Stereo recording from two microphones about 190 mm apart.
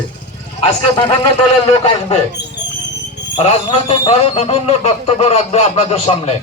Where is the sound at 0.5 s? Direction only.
30° left (ahead or behind).